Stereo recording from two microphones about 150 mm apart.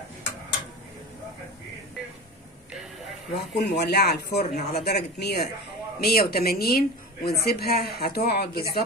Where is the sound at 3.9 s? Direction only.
90° left.